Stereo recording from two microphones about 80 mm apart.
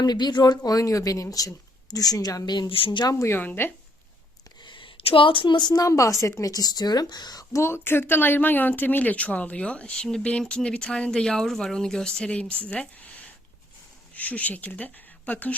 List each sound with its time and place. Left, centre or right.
0.0 s speech: left
2.5 s a woman's voice: left
3.1 s speech: left
3.3 s speech: left
4.6 s a sound: left
5.7 s speech: left
7.5 s speech: left